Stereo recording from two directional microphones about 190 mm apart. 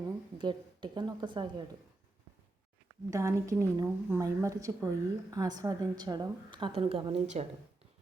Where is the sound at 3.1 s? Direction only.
15° right (ahead or behind).